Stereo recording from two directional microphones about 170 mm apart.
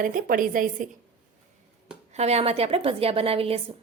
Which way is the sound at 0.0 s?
55° right (ahead or behind).